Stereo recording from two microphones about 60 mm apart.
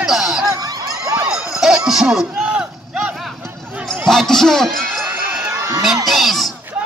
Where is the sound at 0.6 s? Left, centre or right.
Right.